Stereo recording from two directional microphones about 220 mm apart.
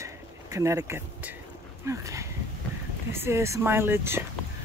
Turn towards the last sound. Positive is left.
turn(degrees=-10)  # may be behind; listen again after turning